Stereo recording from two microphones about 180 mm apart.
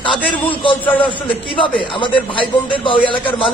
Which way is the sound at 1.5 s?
25° left (ahead or behind).